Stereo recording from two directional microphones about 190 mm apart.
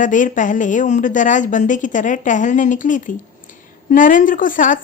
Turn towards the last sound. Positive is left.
turn(degrees=45)  # may be behind; listen again after turning